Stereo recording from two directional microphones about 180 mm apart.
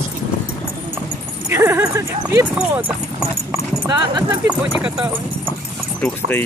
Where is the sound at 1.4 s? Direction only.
15° right (ahead or behind).